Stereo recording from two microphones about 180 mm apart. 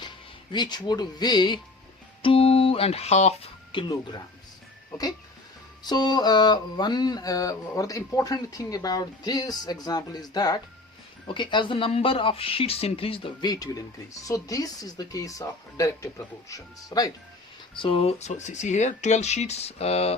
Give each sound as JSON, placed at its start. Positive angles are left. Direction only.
{"t": 0.5, "sound": "speech", "side_deg": 25}
{"t": 17.8, "sound": "speech", "side_deg": 30}